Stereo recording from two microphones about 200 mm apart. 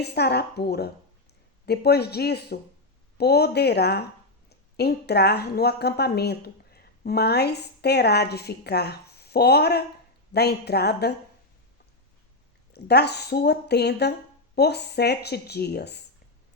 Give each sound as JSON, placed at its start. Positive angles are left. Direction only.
{"t": 0.0, "sound": "a woman's voice", "side_deg": 55}
{"t": 12.7, "sound": "speech", "side_deg": 55}